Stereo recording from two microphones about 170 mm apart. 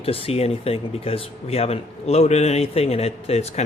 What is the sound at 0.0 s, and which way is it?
Speech, 35° left (ahead or behind).